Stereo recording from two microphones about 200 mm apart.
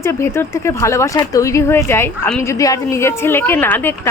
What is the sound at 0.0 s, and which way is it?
Speech, 15° left (ahead or behind).